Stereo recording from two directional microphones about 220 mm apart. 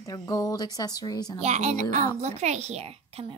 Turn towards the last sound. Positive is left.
turn(degrees=-30)  # may be behind; listen again after turning